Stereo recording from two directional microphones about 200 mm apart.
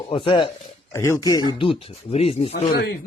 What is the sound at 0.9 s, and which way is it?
Speech, 15° left (ahead or behind).